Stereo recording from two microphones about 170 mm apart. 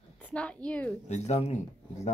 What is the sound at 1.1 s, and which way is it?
Speech, 40° left (ahead or behind).